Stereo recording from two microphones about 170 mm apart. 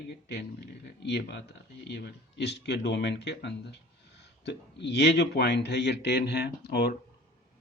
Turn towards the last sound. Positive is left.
turn(degrees=75)  # may be behind; listen again after turning